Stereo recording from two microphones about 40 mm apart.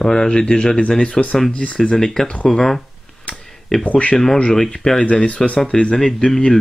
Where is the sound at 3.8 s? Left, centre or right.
Left.